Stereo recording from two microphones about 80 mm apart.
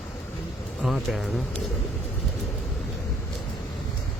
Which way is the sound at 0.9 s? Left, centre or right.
Centre.